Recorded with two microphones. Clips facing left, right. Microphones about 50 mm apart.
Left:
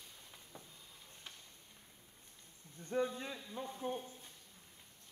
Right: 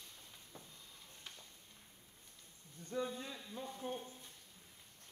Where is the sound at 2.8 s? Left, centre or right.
Left.